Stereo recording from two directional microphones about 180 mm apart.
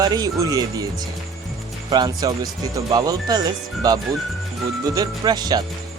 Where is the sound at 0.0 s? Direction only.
20° right (ahead or behind).